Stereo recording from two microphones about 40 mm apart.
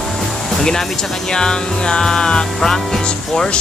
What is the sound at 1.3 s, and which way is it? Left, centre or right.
Speech, centre.